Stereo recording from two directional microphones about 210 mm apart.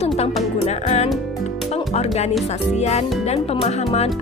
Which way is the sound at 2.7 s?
30° left (ahead or behind).